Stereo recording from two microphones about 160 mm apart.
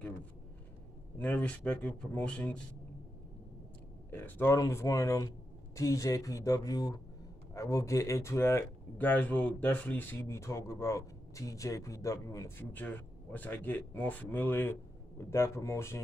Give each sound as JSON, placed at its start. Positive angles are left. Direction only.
{"t": 1.1, "sound": "speech", "side_deg": 10}
{"t": 4.1, "sound": "speech", "side_deg": 15}